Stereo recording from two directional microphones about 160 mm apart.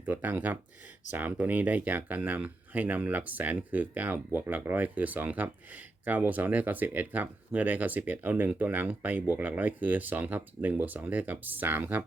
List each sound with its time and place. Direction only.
0.0 s speech: 10° right (ahead or behind)